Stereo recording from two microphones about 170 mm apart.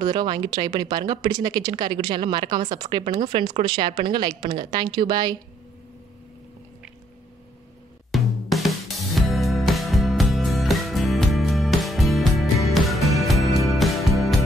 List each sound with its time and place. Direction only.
0.0 s speech: 25° right (ahead or behind)
8.1 s music: centre (ahead or behind)